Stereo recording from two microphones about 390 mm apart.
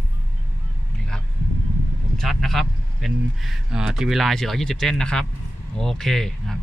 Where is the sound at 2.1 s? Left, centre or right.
Centre.